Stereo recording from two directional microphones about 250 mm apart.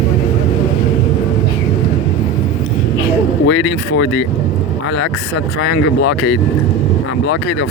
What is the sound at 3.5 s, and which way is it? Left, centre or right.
Speech, left.